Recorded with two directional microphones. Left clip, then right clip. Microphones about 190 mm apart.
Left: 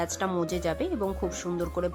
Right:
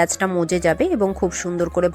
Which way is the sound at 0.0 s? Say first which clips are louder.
Right 10 dB; 30° right (ahead or behind).